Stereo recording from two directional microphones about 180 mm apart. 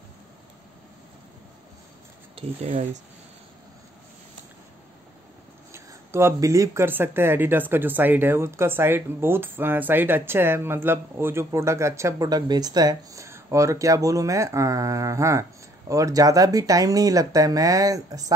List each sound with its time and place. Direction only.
2.3 s speech: 35° right (ahead or behind)
5.7 s speech: 15° right (ahead or behind)